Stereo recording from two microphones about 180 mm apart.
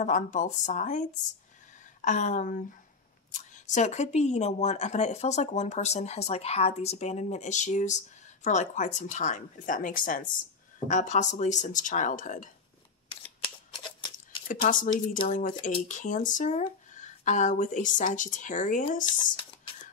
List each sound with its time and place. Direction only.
0.0 s speech: 45° left (ahead or behind)
3.7 s speech: 40° left (ahead or behind)
14.6 s speech: 45° left (ahead or behind)